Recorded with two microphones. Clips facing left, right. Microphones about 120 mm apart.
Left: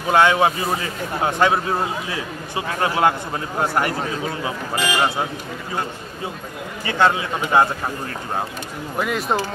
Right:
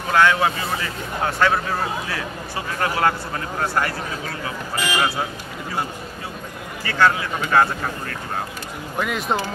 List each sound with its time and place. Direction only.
0.1 s a man's voice: 20° left (ahead or behind)
6.8 s a man's voice: 20° left (ahead or behind)
8.9 s speech: centre (ahead or behind)